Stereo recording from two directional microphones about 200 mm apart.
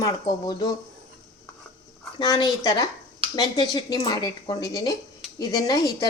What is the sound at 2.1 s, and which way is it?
Speech, 20° left (ahead or behind).